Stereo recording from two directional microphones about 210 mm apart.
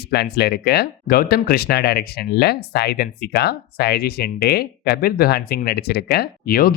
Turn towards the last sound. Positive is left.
turn(degrees=50)  # may be behind; listen again after turning